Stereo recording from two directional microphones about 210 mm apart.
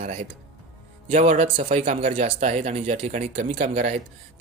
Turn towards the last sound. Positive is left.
turn(degrees=-30)  # may be behind; listen again after turning